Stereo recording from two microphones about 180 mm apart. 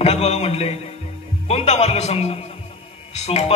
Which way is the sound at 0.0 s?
35° left (ahead or behind).